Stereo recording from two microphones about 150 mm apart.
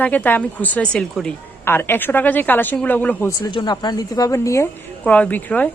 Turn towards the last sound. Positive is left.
turn(degrees=10)  # may be behind; listen again after turning